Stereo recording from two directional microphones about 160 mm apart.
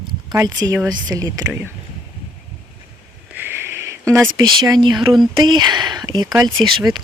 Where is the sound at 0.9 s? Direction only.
25° right (ahead or behind).